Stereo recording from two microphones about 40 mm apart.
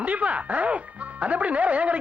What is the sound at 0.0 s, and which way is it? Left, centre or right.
Speech, right.